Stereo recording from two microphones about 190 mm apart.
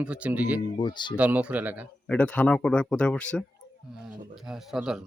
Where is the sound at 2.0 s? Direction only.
10° left (ahead or behind).